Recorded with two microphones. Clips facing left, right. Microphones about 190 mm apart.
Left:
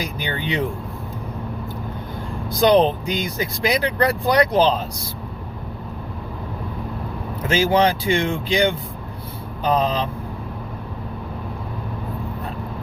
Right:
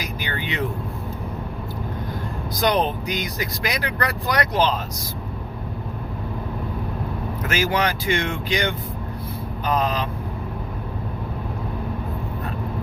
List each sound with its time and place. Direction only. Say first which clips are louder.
0.0 s speech: left 3 dB; 30° left (ahead or behind)
2.6 s speech: left 6 dB; 30° left (ahead or behind)
7.4 s speech: left 5 dB; 25° left (ahead or behind)
9.7 s speech: left 2 dB; 25° left (ahead or behind)